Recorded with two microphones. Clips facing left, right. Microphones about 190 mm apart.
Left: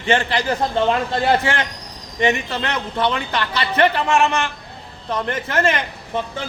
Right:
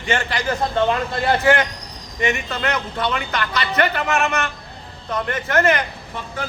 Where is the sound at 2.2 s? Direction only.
30° left (ahead or behind).